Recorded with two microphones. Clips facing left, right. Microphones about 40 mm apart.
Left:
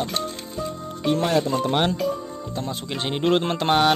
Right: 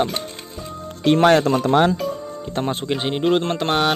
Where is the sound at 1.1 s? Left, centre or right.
Right.